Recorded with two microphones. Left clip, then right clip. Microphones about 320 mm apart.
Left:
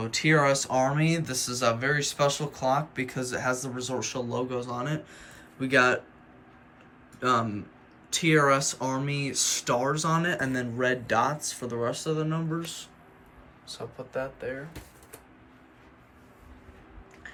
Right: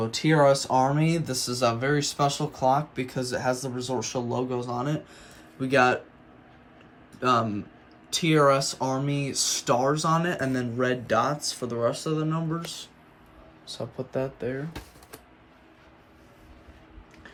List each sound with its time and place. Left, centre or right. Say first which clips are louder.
0.0 s speech: right 2 dB; centre
8.2 s speech: right 1 dB; centre
11.2 s speech: right 1 dB; left
11.8 s speech: right 2 dB; centre
13.7 s speech: right 4 dB; centre